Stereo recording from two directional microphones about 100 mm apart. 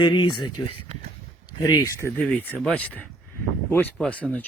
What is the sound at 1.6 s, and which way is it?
Speech, 40° left (ahead or behind).